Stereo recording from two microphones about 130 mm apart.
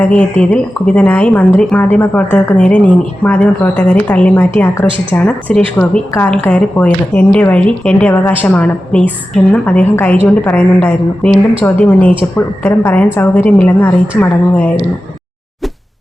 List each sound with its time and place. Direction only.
0.0 s a woman's voice: 10° left (ahead or behind)